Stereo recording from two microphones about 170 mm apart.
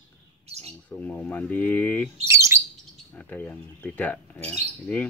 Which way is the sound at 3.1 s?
10° left (ahead or behind).